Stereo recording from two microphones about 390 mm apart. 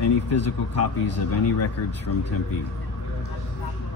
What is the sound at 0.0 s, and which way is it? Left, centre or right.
Speech, left.